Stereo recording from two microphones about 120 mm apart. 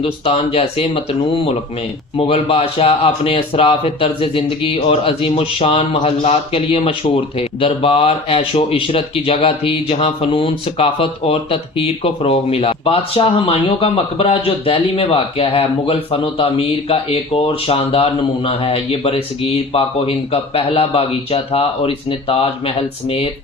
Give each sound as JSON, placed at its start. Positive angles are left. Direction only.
{"t": 0.0, "sound": "speech", "side_deg": 55}
{"t": 2.1, "sound": "speech", "side_deg": 55}